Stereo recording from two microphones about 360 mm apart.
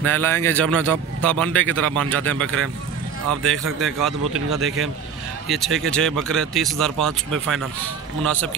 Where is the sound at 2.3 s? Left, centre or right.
Right.